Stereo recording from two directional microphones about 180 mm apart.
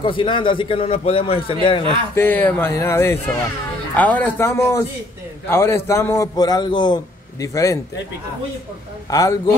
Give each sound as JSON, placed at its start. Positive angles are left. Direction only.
{"t": 0.0, "sound": "a man's voice", "side_deg": 25}
{"t": 2.1, "sound": "a man's voice", "side_deg": 10}
{"t": 9.1, "sound": "a man's voice", "side_deg": 20}